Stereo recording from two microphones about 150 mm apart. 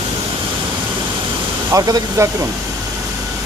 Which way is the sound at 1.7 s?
20° right (ahead or behind).